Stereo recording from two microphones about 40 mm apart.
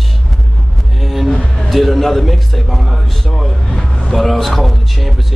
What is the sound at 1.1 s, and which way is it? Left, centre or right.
A man's voice, centre.